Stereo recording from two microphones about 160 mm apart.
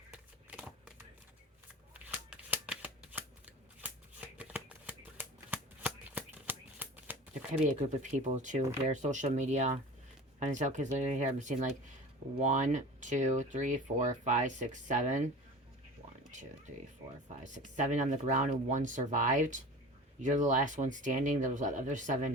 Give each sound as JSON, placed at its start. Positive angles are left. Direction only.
{"t": 0.1, "sound": "a sound", "side_deg": -5}
{"t": 1.9, "sound": "shuffling cards", "side_deg": -10}
{"t": 4.4, "sound": "shuffling cards", "side_deg": -10}
{"t": 7.7, "sound": "speech", "side_deg": -45}
{"t": 17.7, "sound": "speech", "side_deg": -50}